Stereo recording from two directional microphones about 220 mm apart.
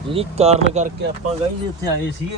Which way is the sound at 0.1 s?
25° right (ahead or behind).